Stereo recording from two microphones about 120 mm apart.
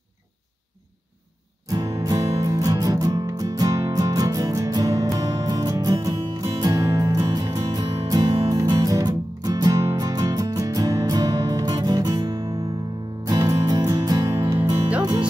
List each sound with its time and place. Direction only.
1.7 s music: 30° right (ahead or behind)